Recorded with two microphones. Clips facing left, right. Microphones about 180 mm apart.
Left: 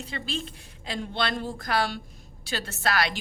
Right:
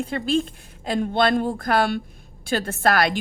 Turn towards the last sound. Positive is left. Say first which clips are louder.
# right 7 dB
turn(degrees=-50)  # may be behind; listen again after turning